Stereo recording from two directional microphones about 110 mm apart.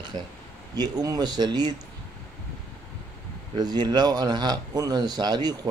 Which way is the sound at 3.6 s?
40° right (ahead or behind).